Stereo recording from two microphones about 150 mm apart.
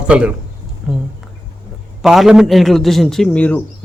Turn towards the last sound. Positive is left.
turn(degrees=10)  # may be behind; listen again after turning